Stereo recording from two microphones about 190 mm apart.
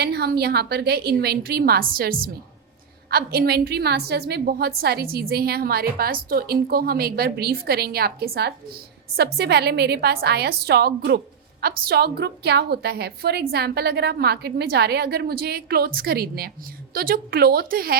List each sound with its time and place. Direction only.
0.0 s a woman's voice: 55° right (ahead or behind)